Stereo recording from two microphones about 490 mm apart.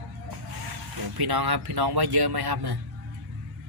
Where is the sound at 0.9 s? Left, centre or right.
Right.